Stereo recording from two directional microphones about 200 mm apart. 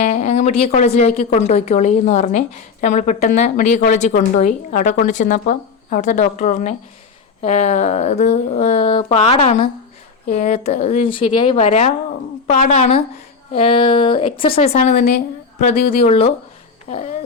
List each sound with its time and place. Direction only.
0.0 s a woman's voice: 35° left (ahead or behind)